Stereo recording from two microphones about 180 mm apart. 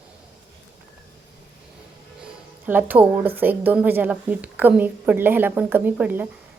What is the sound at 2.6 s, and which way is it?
Speech, 10° right (ahead or behind).